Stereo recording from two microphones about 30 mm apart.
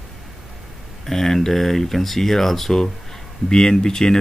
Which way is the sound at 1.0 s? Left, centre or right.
Centre.